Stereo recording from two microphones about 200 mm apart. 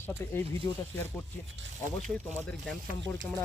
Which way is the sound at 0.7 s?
20° left (ahead or behind).